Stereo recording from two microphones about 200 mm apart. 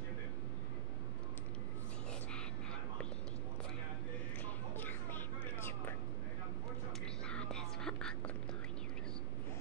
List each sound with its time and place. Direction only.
2.3 s whispering: 5° left (ahead or behind)
4.7 s whispering: 10° left (ahead or behind)
7.2 s music: 5° left (ahead or behind)